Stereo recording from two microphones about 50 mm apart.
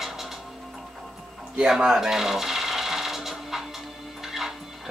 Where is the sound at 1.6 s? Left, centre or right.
Centre.